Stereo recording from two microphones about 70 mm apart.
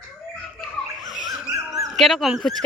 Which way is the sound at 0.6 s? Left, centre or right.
Centre.